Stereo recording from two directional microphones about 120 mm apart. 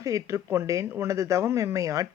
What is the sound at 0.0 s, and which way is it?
Speech, 25° right (ahead or behind).